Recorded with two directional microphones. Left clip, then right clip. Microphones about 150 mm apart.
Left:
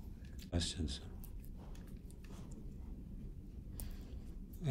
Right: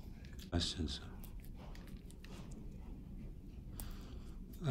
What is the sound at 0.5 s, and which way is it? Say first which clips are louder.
Speech: right 2 dB; 5° left (ahead or behind).